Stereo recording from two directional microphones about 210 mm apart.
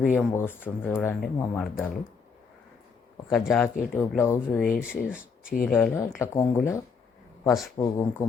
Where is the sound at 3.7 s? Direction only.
40° left (ahead or behind).